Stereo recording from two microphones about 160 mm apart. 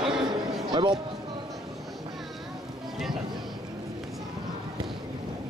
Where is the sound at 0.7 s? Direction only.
30° right (ahead or behind).